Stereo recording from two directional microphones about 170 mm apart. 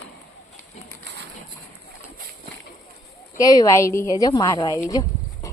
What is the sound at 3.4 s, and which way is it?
Speech, 20° left (ahead or behind).